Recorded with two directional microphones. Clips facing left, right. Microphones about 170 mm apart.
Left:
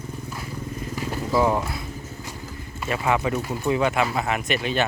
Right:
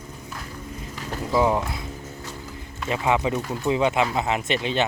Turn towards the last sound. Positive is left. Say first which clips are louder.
# even
turn(degrees=-25)  # may be behind; listen again after turning